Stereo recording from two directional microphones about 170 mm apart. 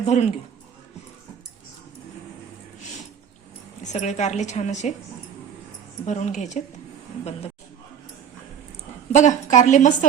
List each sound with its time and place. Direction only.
0.0 s a woman's voice: 45° left (ahead or behind)
3.8 s a woman's voice: 45° left (ahead or behind)
6.1 s a woman's voice: 45° left (ahead or behind)
9.1 s a woman's voice: 45° left (ahead or behind)